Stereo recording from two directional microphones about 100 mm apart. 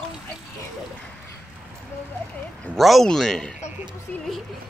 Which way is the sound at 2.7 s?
Centre (ahead or behind).